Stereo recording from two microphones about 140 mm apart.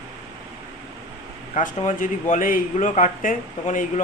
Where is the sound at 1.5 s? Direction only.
65° left (ahead or behind).